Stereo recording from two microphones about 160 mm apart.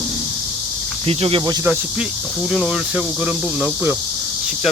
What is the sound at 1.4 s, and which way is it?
Speech, 25° right (ahead or behind).